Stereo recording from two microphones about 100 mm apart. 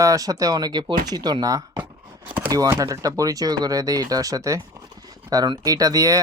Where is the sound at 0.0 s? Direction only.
35° right (ahead or behind).